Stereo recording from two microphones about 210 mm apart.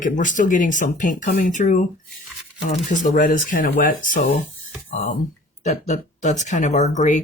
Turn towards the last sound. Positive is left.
turn(degrees=35)  # may be behind; listen again after turning